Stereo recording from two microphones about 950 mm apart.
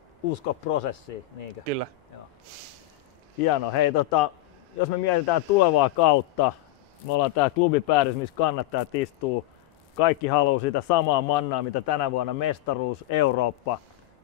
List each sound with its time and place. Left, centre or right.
0.3 s speech: left
1.7 s speech: right
3.4 s a man's voice: left